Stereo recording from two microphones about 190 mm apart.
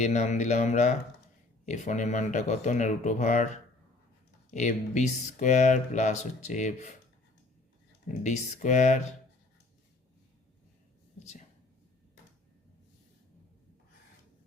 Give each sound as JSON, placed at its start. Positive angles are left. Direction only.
{"t": 0.0, "sound": "speech", "side_deg": 35}
{"t": 8.0, "sound": "speech", "side_deg": 40}
{"t": 11.2, "sound": "a sound", "side_deg": 40}